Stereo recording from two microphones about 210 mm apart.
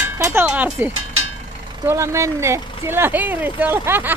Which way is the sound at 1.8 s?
15° right (ahead or behind).